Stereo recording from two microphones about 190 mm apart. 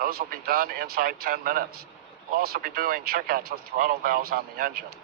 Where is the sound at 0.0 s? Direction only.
50° right (ahead or behind).